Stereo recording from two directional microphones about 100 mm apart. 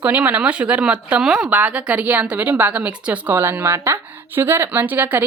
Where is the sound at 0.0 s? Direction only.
15° right (ahead or behind).